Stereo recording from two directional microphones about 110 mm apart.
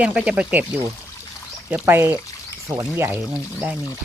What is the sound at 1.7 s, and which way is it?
Speech, 20° right (ahead or behind).